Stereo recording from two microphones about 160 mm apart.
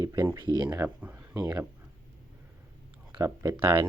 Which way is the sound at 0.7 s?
10° right (ahead or behind).